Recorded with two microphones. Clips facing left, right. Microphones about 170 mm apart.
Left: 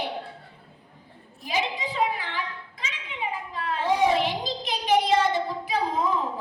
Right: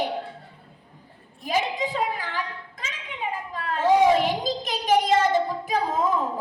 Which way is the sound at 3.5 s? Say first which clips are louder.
Right 6 dB; 45° right (ahead or behind).